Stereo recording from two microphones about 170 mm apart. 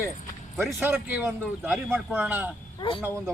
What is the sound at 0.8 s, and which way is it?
Speech, 10° right (ahead or behind).